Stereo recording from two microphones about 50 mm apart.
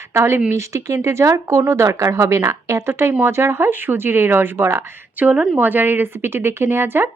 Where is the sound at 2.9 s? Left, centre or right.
Right.